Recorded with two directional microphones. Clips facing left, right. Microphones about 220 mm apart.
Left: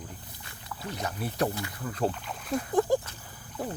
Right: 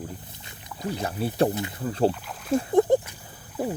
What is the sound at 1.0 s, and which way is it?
Speech, 30° right (ahead or behind).